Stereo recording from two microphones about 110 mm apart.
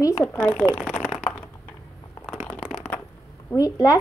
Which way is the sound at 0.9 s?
Centre (ahead or behind).